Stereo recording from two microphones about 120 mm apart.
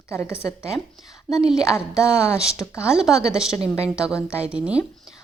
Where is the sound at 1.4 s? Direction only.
5° right (ahead or behind).